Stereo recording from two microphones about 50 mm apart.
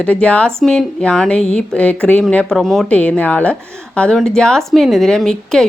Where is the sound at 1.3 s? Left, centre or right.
Left.